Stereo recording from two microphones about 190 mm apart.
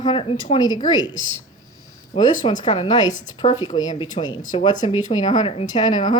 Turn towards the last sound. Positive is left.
turn(degrees=25)  # may be behind; listen again after turning